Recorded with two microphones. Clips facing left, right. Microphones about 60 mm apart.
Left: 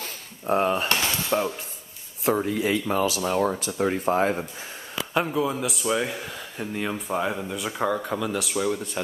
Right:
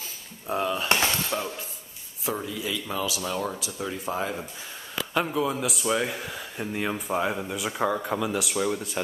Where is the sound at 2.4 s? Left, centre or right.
Left.